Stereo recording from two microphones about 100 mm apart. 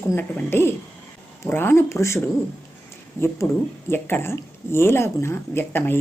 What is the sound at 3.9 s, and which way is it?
Speech, 20° left (ahead or behind).